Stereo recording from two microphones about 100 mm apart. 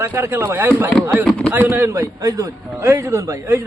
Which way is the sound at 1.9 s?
30° right (ahead or behind).